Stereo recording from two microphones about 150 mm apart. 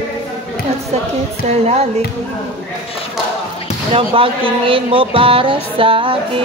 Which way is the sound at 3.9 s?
40° right (ahead or behind).